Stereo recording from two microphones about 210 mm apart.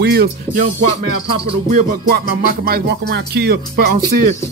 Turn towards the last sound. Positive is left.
turn(degrees=-50)  # may be behind; listen again after turning